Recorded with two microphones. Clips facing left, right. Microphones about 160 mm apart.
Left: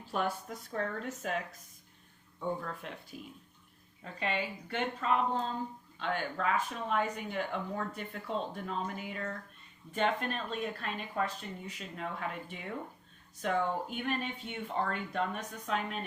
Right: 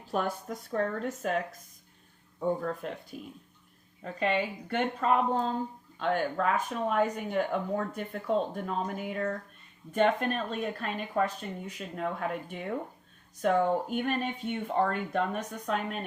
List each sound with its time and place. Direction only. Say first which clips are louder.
0.1 s speech: right 3 dB; 45° right (ahead or behind)
2.4 s speech: right 6 dB; 40° right (ahead or behind)